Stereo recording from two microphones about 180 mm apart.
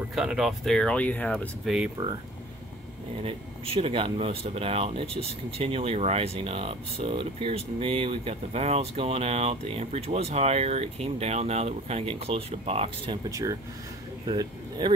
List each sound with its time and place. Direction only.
0.1 s speech: 5° right (ahead or behind)
2.0 s speech: 25° right (ahead or behind)
3.7 s speech: 30° right (ahead or behind)
13.3 s speech: 20° right (ahead or behind)